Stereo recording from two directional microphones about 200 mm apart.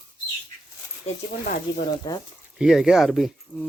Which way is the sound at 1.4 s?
45° left (ahead or behind).